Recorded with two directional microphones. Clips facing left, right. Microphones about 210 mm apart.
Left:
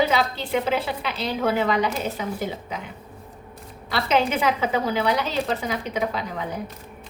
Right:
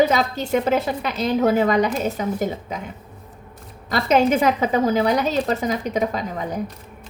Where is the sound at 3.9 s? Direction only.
45° right (ahead or behind).